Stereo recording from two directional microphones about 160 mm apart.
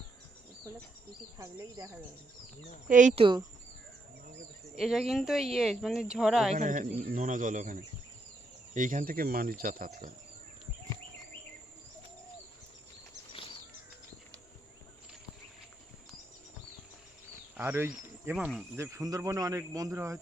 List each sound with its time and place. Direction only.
1.4 s speech: 20° right (ahead or behind)
2.9 s speech: 50° right (ahead or behind)
3.2 s speech: 30° right (ahead or behind)
4.8 s speech: centre (ahead or behind)
6.5 s speech: 50° right (ahead or behind)
17.6 s speech: 15° right (ahead or behind)
18.3 s speech: centre (ahead or behind)
18.8 s speech: 20° right (ahead or behind)